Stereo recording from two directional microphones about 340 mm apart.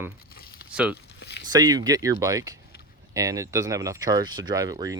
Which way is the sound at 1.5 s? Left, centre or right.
Centre.